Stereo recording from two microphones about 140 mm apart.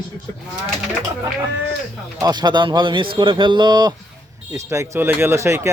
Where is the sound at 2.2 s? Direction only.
30° right (ahead or behind).